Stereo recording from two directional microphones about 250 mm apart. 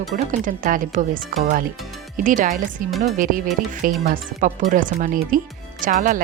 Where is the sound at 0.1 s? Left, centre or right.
Right.